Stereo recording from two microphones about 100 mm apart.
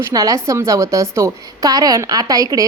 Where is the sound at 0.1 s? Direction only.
35° right (ahead or behind).